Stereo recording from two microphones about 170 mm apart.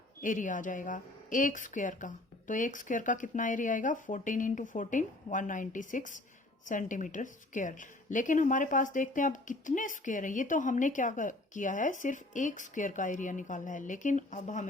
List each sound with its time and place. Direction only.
0.2 s a woman's voice: 50° left (ahead or behind)